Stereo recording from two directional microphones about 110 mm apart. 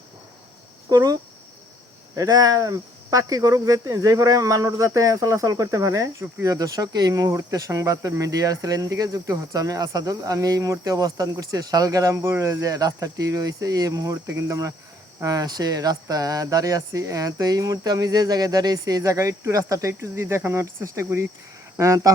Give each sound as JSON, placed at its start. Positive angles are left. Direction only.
{"t": 0.9, "sound": "speech", "side_deg": -35}